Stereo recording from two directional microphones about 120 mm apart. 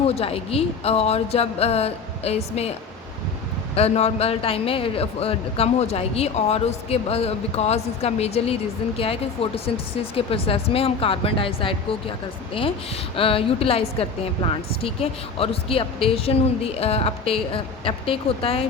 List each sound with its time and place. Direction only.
0.1 s a man's voice: 55° left (ahead or behind)
3.8 s a man's voice: 60° left (ahead or behind)
13.1 s a woman's voice: 50° left (ahead or behind)